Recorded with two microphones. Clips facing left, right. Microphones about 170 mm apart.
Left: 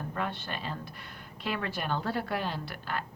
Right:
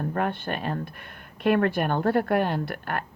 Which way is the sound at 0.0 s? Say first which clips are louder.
Right 8 dB; 55° right (ahead or behind).